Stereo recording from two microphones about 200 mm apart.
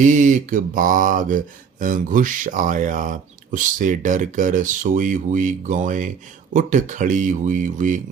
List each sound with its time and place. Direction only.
0.0 s speech: 40° right (ahead or behind)